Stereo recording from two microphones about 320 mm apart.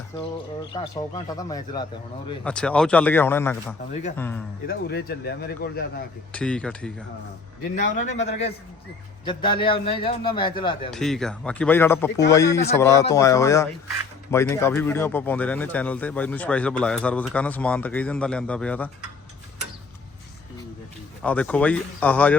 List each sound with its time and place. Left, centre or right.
0.7 s a man's voice: centre
4.6 s speech: left
6.3 s speech: centre
7.9 s a man's voice: left
10.9 s a man's voice: centre
21.2 s speech: centre